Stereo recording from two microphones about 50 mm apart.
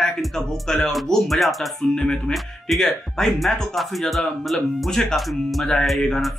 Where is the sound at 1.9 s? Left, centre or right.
Centre.